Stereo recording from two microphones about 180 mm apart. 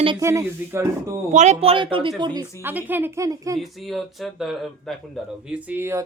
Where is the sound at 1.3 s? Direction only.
40° right (ahead or behind); by 2.5 s 25° right (ahead or behind).